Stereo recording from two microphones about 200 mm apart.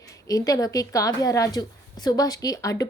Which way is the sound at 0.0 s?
15° left (ahead or behind).